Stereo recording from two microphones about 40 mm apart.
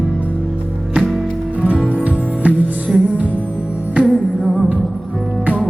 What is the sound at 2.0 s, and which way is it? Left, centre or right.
Music, right.